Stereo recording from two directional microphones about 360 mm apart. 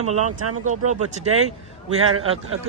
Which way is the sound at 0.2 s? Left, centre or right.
Right.